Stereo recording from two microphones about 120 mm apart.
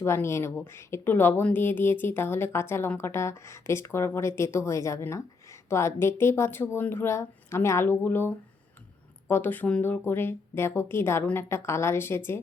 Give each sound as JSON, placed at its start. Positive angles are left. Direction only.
{"t": 0.0, "sound": "a woman's voice", "side_deg": 20}